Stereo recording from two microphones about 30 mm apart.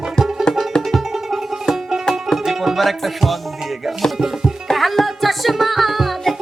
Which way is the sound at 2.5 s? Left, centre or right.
Centre.